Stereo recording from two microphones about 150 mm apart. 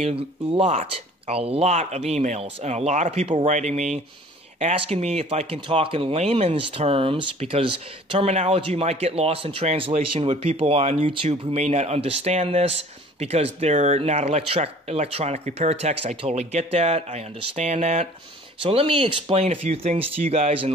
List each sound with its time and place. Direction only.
0.0 s speech: 40° right (ahead or behind)
18.6 s speech: 40° right (ahead or behind)